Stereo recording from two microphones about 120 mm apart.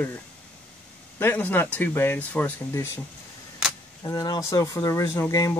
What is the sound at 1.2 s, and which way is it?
Speech, 15° left (ahead or behind).